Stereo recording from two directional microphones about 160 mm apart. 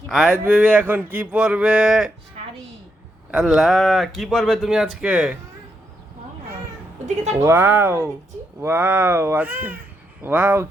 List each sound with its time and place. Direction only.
0.1 s speech: 5° right (ahead or behind)
3.3 s speech: 5° right (ahead or behind)
7.0 s speech: 45° right (ahead or behind)
7.4 s speech: 15° right (ahead or behind)